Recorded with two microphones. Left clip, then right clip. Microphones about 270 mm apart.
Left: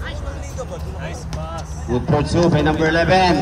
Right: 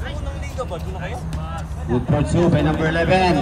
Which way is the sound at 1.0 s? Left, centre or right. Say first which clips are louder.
Left 1 dB; centre.